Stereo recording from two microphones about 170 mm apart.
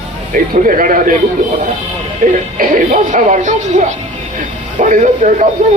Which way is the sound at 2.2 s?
55° right (ahead or behind).